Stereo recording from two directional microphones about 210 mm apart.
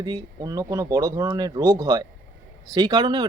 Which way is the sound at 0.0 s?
20° right (ahead or behind).